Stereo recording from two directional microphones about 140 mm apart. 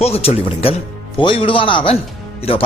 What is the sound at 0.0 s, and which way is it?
Speech, 45° left (ahead or behind).